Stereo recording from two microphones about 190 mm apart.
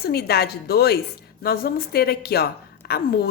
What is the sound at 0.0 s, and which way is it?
A woman's voice, 55° left (ahead or behind).